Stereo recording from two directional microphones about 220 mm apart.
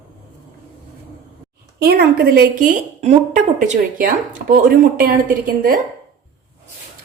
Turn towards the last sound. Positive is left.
turn(degrees=-40)  # may be behind; listen again after turning